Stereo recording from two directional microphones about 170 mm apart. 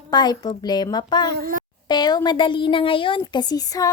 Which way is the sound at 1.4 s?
55° right (ahead or behind).